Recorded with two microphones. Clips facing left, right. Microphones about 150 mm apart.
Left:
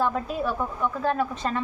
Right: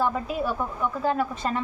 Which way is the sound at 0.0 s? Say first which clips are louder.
Even; 5° right (ahead or behind).